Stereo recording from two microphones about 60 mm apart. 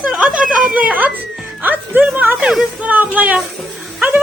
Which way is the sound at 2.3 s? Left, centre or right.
Centre.